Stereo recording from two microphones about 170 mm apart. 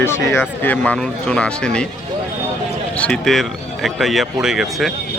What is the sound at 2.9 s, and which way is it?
Speech, 5° left (ahead or behind).